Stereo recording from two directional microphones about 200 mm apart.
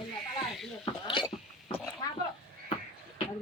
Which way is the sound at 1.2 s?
5° right (ahead or behind).